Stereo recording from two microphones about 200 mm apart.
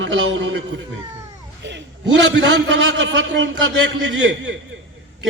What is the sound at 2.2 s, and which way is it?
A man's voice, 60° right (ahead or behind).